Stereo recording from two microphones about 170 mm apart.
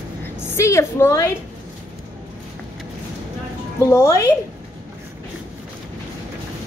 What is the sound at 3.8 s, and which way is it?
Speech, 20° left (ahead or behind).